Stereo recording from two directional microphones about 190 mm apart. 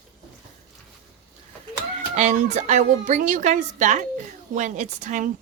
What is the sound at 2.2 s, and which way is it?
A woman's voice, 35° right (ahead or behind).